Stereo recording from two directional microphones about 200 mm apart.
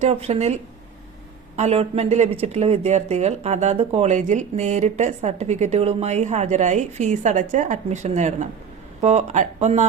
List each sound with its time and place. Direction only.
0.0 s speech: 30° right (ahead or behind)